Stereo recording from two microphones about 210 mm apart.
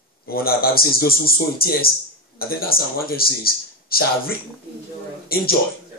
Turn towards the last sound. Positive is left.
turn(degrees=45)  # may be behind; listen again after turning